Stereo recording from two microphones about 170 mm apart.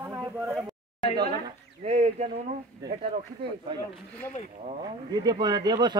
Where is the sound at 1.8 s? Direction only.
40° right (ahead or behind).